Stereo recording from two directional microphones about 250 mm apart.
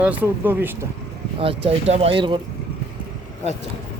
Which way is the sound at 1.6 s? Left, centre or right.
Right.